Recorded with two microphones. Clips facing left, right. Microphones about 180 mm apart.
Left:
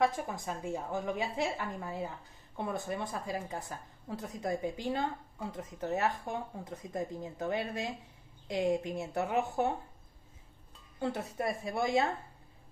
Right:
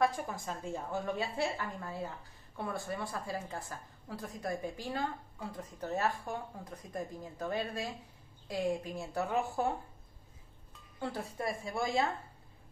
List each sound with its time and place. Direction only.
0.0 s a woman's voice: 20° left (ahead or behind)
11.0 s a woman's voice: 25° left (ahead or behind)